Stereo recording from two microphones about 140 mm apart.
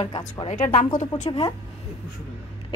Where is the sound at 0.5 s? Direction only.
65° left (ahead or behind).